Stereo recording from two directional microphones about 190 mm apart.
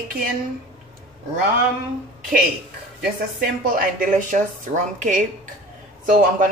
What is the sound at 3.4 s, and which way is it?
Speech, 45° right (ahead or behind).